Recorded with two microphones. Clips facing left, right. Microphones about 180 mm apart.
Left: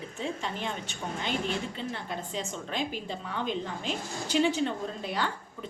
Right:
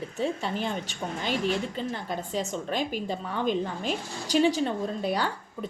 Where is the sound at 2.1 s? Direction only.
40° right (ahead or behind).